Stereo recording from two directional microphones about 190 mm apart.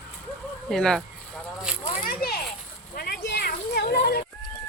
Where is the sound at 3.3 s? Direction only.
55° left (ahead or behind).